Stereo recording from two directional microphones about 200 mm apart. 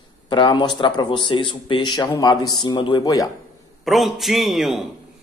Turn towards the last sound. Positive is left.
turn(degrees=0)  # may be behind; listen again after turning